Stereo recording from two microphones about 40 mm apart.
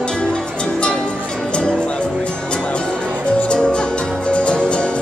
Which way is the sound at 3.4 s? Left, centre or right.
Left.